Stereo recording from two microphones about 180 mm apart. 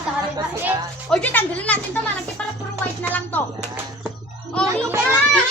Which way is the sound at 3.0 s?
10° left (ahead or behind).